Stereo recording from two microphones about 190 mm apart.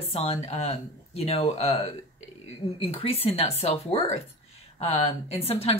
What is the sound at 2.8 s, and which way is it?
Speech, 30° left (ahead or behind).